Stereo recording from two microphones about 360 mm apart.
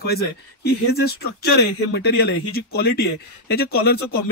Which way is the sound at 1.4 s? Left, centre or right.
Left.